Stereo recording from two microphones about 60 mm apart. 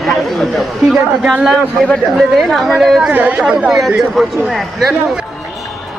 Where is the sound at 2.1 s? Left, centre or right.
Centre.